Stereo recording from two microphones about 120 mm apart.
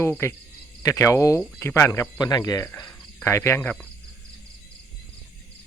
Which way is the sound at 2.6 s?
20° left (ahead or behind).